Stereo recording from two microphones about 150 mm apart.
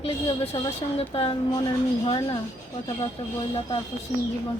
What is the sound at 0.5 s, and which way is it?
Speech, 40° left (ahead or behind).